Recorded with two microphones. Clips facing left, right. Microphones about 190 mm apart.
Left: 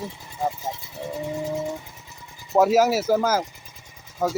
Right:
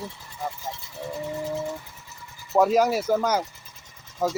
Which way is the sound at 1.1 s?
15° left (ahead or behind).